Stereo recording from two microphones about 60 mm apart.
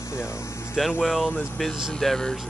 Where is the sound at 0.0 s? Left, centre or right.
Left.